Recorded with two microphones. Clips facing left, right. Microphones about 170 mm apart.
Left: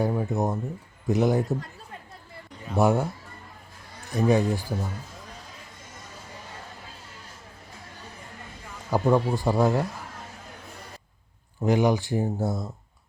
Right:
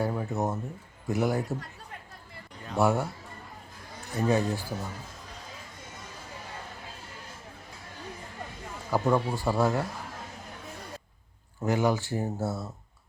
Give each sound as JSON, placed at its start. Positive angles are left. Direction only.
{"t": 0.0, "sound": "speech", "side_deg": 15}
{"t": 2.7, "sound": "speech", "side_deg": 15}
{"t": 4.1, "sound": "speech", "side_deg": 15}
{"t": 8.9, "sound": "speech", "side_deg": 15}
{"t": 11.6, "sound": "speech", "side_deg": 15}